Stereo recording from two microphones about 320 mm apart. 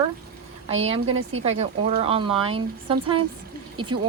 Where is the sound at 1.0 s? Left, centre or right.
Right.